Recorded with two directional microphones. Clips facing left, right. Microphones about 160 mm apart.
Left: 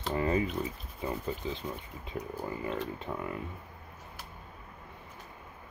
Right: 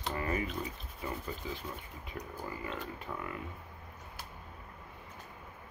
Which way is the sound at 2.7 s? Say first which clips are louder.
Left 5 dB; 25° left (ahead or behind).